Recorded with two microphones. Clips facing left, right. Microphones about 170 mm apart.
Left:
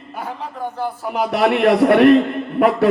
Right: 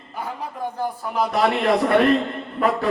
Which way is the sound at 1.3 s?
70° left (ahead or behind).